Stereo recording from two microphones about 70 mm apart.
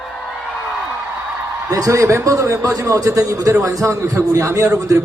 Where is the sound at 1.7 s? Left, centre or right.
Right.